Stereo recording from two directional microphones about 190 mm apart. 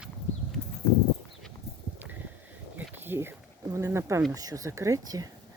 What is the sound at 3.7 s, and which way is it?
Speech, 15° right (ahead or behind).